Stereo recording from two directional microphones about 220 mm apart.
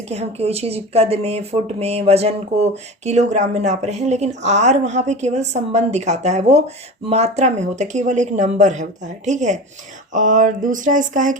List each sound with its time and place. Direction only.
0.1 s speech: 30° right (ahead or behind)